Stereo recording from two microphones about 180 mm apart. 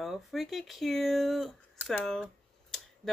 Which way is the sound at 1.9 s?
5° left (ahead or behind).